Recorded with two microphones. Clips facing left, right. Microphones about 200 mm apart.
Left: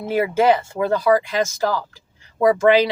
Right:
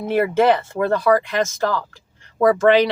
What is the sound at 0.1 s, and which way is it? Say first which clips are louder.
Speech: right 1 dB; 5° left (ahead or behind).